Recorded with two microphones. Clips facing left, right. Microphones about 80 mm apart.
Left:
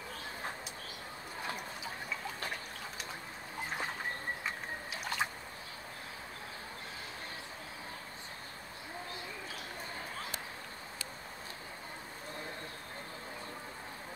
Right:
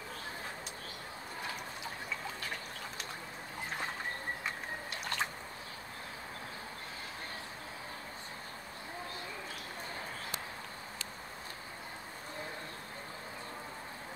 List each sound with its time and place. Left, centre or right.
4.9 s drip: centre